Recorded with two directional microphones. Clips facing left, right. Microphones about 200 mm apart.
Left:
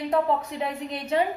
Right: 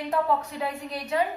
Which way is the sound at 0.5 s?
25° left (ahead or behind).